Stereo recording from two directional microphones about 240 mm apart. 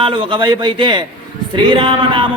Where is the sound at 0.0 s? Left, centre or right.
Centre.